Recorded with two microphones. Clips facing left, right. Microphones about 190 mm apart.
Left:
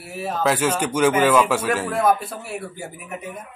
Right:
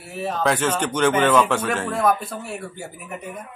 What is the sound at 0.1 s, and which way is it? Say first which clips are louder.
Speech: even; 5° left (ahead or behind).